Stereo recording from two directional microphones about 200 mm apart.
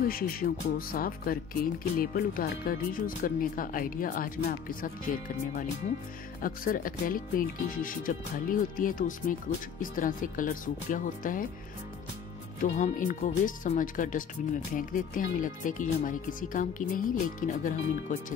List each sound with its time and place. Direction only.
0.1 s speech: 45° left (ahead or behind)
12.5 s speech: 35° left (ahead or behind)